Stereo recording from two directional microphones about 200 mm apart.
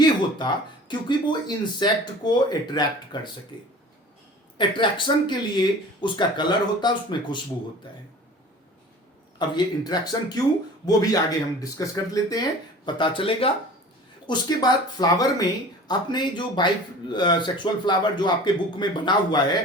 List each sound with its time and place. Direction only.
0.0 s speech: 20° left (ahead or behind)
9.4 s speech: 20° left (ahead or behind)